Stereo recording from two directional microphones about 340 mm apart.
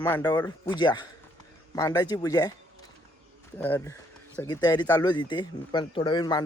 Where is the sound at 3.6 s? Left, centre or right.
Centre.